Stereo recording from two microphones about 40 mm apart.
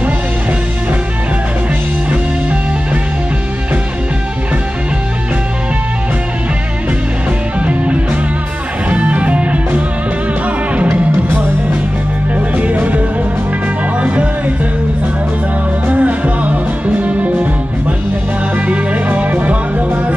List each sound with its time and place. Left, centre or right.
7.6 s music: right
12.4 s music: right
15.9 s music: right
19.1 s music: right